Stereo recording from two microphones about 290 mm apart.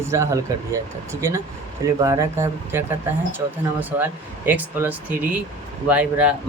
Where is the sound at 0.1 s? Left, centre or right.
Centre.